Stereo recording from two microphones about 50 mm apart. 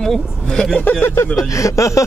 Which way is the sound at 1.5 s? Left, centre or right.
Left.